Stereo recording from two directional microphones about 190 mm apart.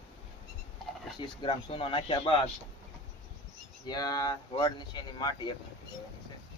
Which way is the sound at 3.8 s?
20° left (ahead or behind).